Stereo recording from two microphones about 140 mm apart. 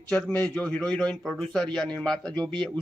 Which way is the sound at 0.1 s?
10° left (ahead or behind).